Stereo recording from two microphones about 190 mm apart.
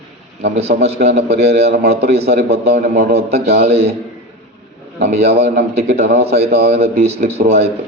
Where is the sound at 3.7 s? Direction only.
35° right (ahead or behind).